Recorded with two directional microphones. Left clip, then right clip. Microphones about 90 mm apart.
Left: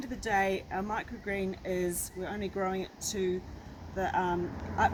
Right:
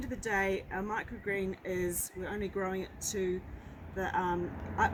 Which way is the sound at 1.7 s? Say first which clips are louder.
Left 3 dB; 35° left (ahead or behind).